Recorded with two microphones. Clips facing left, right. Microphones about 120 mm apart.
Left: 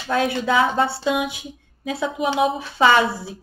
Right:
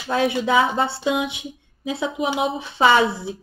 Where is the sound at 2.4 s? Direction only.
25° right (ahead or behind).